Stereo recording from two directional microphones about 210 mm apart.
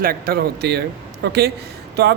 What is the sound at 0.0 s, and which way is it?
A woman's voice, 45° right (ahead or behind).